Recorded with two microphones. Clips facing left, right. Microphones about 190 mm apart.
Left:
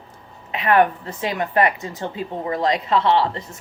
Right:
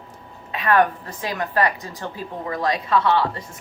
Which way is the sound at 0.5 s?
20° left (ahead or behind).